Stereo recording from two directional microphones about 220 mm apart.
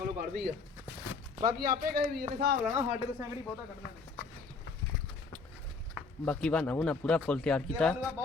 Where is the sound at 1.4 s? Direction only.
40° right (ahead or behind).